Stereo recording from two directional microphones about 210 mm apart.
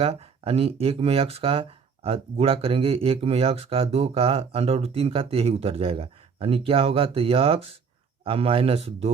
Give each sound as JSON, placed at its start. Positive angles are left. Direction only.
{"t": 0.0, "sound": "speech", "side_deg": -30}